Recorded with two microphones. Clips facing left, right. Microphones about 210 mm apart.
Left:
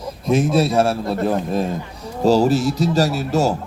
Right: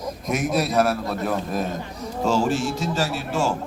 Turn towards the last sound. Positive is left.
turn(degrees=40)  # may be behind; listen again after turning